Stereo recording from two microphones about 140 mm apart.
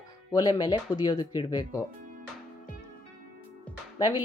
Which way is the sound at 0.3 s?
30° left (ahead or behind).